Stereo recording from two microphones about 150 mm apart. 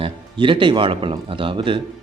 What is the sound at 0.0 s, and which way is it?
Speech, 35° right (ahead or behind).